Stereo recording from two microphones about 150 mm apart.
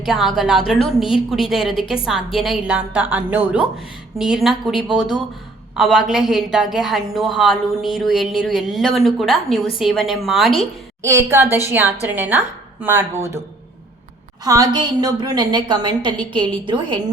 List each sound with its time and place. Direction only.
0.0 s a woman's voice: centre (ahead or behind)
11.3 s speech: 15° right (ahead or behind)
14.4 s a woman's voice: 25° right (ahead or behind)